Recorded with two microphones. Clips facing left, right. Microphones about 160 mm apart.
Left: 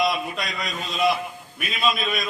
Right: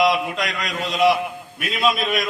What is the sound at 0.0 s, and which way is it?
A man's voice, 90° right.